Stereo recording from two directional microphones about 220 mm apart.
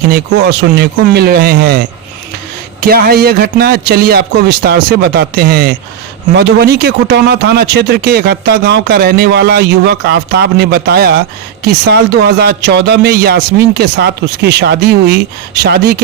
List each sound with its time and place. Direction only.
0.1 s speech: 50° right (ahead or behind)
2.8 s speech: 45° right (ahead or behind)